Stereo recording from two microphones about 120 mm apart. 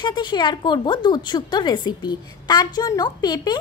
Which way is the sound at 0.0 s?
40° left (ahead or behind).